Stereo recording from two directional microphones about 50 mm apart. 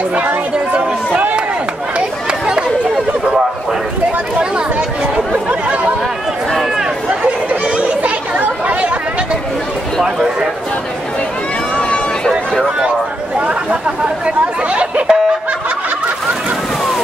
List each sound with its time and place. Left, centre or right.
1.1 s chop: right
2.0 s chatter: centre
5.3 s chatter: right
8.0 s chatter: right
13.7 s speech: right